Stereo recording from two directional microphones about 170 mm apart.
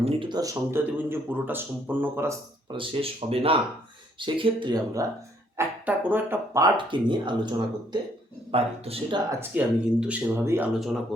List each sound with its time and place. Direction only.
0.0 s speech: 30° right (ahead or behind); by 2.3 s 10° right (ahead or behind)
2.6 s speech: 30° right (ahead or behind)
5.5 s speech: 10° right (ahead or behind)
6.7 s speech: 30° right (ahead or behind)
8.5 s speech: 35° right (ahead or behind)
9.4 s speech: 5° right (ahead or behind)